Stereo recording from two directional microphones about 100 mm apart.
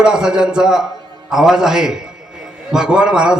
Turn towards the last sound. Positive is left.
turn(degrees=-10)  # may be behind; listen again after turning